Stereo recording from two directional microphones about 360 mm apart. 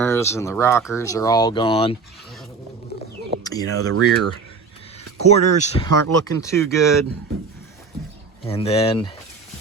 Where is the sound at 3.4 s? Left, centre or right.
Centre.